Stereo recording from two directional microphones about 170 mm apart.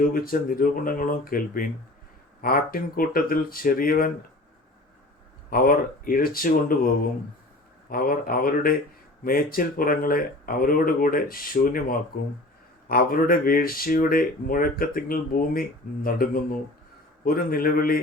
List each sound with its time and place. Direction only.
0.0 s speech: 55° left (ahead or behind)
5.5 s speech: 60° left (ahead or behind)
7.9 s speech: 55° left (ahead or behind)